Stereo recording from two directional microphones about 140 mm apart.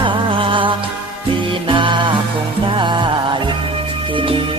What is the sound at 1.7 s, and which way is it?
Music, 35° right (ahead or behind).